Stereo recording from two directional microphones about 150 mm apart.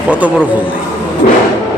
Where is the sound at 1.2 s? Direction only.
60° left (ahead or behind).